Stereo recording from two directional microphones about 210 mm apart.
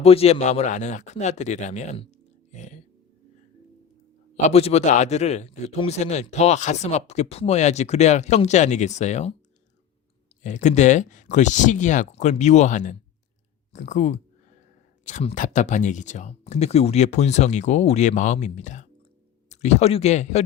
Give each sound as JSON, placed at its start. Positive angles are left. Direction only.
{"t": 0.0, "sound": "speech", "side_deg": 30}
{"t": 4.4, "sound": "a man's voice", "side_deg": 30}
{"t": 10.4, "sound": "a man's voice", "side_deg": 35}